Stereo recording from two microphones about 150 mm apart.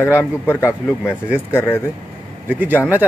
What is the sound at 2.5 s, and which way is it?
Speech, 10° right (ahead or behind).